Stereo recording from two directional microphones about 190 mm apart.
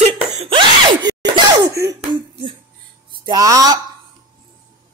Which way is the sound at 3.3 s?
20° right (ahead or behind).